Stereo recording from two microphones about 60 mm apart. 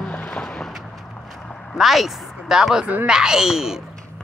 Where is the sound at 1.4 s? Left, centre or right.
Centre.